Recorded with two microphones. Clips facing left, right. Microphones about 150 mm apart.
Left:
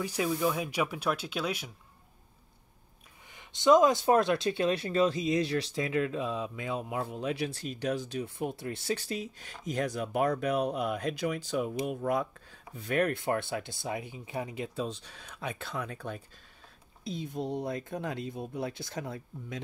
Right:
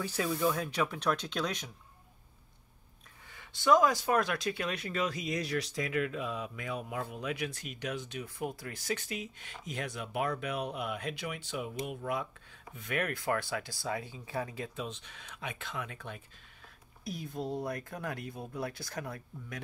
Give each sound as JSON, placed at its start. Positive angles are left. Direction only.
{"t": 0.0, "sound": "speech", "side_deg": 15}
{"t": 3.3, "sound": "speech", "side_deg": 20}
{"t": 8.4, "sound": "speech", "side_deg": 25}
{"t": 14.8, "sound": "speech", "side_deg": 35}
{"t": 17.0, "sound": "speech", "side_deg": 25}